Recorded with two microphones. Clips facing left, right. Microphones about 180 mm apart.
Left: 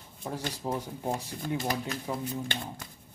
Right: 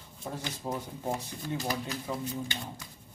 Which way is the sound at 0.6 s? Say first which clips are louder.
Left 2 dB; 10° left (ahead or behind).